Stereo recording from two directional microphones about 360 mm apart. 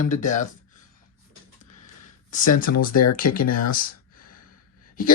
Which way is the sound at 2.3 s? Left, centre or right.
Left.